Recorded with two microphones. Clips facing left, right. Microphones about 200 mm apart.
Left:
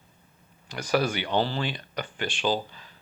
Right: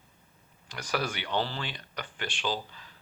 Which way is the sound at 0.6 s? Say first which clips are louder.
Left 7 dB; 25° left (ahead or behind).